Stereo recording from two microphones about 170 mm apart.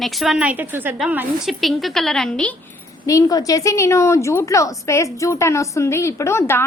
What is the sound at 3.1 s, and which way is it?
A woman's voice, 20° left (ahead or behind).